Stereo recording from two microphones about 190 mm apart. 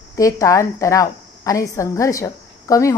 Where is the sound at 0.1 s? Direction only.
15° left (ahead or behind).